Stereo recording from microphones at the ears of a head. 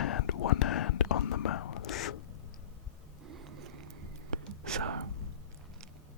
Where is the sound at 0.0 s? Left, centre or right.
Left.